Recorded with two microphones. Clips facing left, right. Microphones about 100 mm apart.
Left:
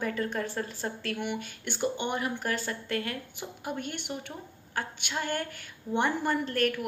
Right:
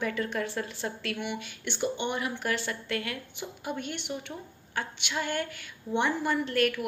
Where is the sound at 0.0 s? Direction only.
35° left (ahead or behind).